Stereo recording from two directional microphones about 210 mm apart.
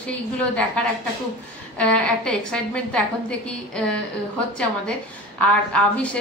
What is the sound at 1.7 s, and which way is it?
A woman's voice, 5° left (ahead or behind).